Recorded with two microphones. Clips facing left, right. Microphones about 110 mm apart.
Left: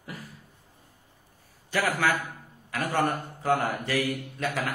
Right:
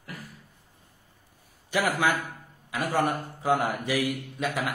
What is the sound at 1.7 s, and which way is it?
A man's voice, 15° right (ahead or behind).